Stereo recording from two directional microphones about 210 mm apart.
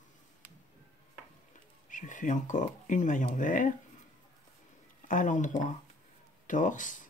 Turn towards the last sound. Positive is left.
turn(degrees=40)  # may be behind; listen again after turning